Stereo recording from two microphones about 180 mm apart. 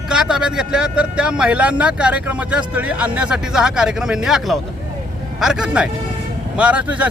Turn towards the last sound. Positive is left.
turn(degrees=-5)  # may be behind; listen again after turning